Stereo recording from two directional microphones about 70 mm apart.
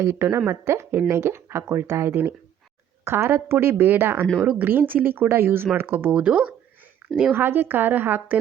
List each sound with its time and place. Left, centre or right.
0.0 s speech: right; by 6.5 s centre
7.0 s a sound: right
7.3 s speech: right